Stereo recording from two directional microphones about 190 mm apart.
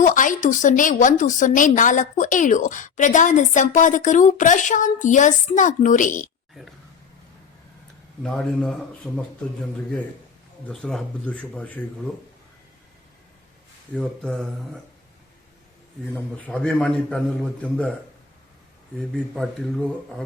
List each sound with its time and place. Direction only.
0.0 s a woman's voice: 45° left (ahead or behind)
6.5 s speech: centre (ahead or behind)
8.2 s a man's voice: centre (ahead or behind)
10.7 s speech: centre (ahead or behind)
13.9 s a man's voice: 5° left (ahead or behind)
16.1 s a man's voice: 5° left (ahead or behind)
19.1 s a man's voice: centre (ahead or behind)